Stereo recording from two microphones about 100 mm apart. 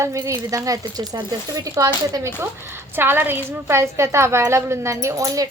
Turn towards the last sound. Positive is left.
turn(degrees=-35)  # may be behind; listen again after turning